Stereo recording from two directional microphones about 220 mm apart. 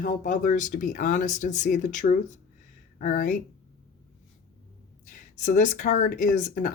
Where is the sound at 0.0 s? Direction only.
35° left (ahead or behind).